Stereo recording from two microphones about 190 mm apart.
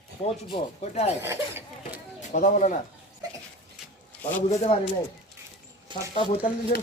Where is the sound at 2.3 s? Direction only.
40° left (ahead or behind).